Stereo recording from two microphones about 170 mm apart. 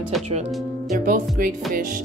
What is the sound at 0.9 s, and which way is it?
Speech, 50° right (ahead or behind).